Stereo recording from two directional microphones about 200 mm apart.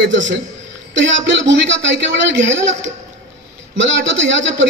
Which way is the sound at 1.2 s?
65° right (ahead or behind).